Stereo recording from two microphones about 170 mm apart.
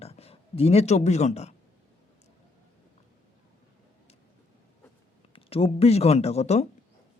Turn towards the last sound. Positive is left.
turn(degrees=40)  # may be behind; listen again after turning